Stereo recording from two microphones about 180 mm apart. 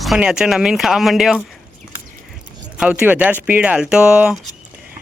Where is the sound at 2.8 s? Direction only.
10° right (ahead or behind).